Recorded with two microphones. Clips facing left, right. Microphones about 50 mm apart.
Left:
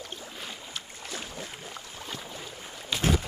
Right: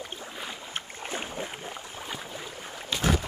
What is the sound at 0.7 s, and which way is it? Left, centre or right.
Boat, right.